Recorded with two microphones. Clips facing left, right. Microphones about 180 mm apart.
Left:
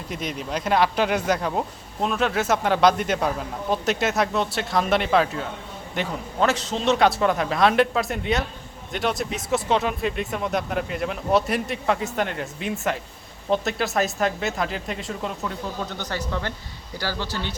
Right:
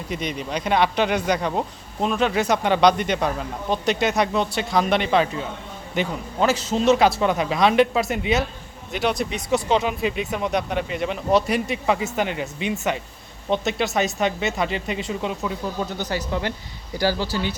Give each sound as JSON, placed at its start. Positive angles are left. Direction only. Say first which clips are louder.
{"t": 0.1, "sound": "speech", "louder": "right 1 dB", "side_deg": 0}